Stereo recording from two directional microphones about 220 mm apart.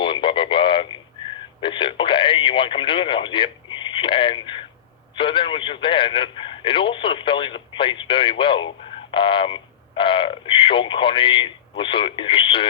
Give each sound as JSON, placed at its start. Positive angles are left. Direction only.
{"t": 0.0, "sound": "radio", "side_deg": 20}
{"t": 1.6, "sound": "speech", "side_deg": 20}